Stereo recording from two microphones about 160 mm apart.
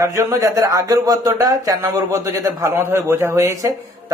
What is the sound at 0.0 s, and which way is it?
Speech, 20° right (ahead or behind).